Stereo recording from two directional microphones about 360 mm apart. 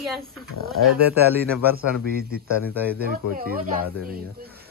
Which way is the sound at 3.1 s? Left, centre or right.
Right.